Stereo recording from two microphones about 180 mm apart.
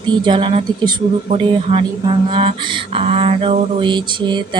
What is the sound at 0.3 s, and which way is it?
Speech, 30° right (ahead or behind).